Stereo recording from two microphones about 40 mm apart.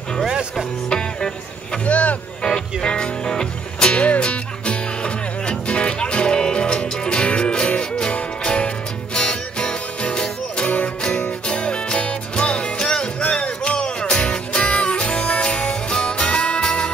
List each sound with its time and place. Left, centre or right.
0.8 s music: centre
1.9 s speech: left
2.4 s music: centre